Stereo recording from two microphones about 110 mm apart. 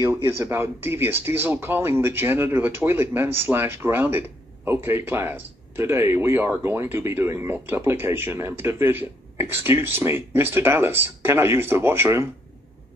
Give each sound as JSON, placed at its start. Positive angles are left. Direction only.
{"t": 0.0, "sound": "speech", "side_deg": -30}